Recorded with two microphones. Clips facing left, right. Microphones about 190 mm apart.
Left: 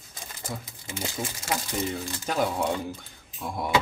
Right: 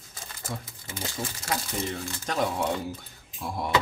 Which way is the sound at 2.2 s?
5° left (ahead or behind).